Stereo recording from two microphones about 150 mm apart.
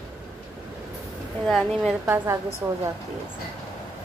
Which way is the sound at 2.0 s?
15° right (ahead or behind).